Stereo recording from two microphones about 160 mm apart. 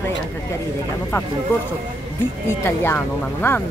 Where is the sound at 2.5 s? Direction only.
15° left (ahead or behind).